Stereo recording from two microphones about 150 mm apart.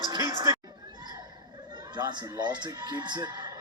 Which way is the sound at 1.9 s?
30° right (ahead or behind).